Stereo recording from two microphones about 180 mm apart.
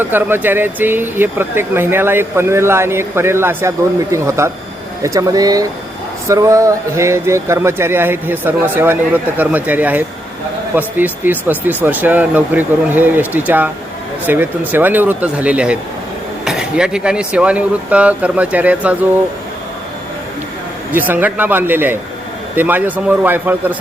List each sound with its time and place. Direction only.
0.0 s speech: 10° right (ahead or behind)
21.1 s speech: 10° right (ahead or behind)